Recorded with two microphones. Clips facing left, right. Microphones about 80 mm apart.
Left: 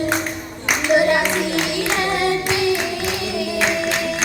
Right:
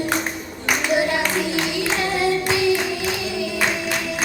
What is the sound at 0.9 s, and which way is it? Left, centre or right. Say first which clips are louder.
Child singing: left 6 dB; left.